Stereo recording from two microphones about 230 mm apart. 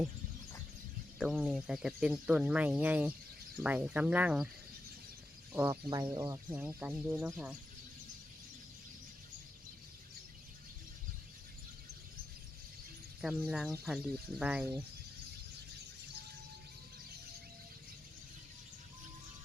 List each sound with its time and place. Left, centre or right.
1.2 s speech: centre
5.5 s speech: centre
13.2 s speech: centre